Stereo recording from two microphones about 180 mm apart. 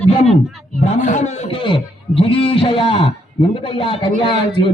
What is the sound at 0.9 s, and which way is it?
Music, 40° left (ahead or behind).